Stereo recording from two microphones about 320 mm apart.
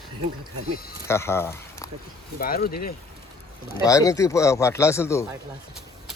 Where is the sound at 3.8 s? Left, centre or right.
Centre.